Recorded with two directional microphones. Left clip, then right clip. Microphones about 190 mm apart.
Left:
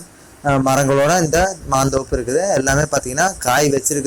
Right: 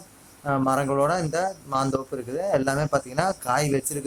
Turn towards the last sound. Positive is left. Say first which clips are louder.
# left 9 dB
turn(degrees=15)  # may be behind; listen again after turning